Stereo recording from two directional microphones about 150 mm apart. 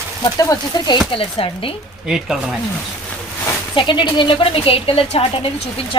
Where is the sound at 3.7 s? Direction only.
30° left (ahead or behind).